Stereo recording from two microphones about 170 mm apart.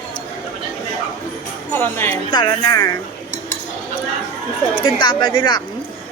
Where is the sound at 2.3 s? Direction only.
25° left (ahead or behind).